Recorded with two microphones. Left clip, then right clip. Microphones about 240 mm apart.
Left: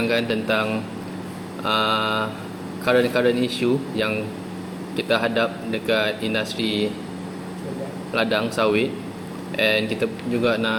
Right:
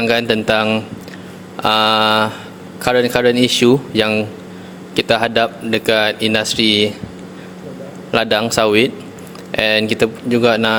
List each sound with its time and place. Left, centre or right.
0.0 s speech: right
8.1 s speech: right